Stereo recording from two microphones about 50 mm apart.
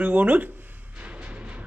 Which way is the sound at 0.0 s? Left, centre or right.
Right.